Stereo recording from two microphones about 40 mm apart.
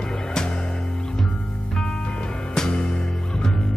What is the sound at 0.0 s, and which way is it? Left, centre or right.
Music, centre.